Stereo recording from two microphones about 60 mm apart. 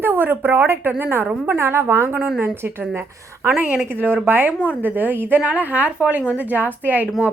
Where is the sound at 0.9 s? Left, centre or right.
Right.